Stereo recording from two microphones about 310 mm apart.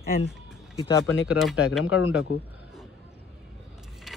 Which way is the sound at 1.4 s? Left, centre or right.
Centre.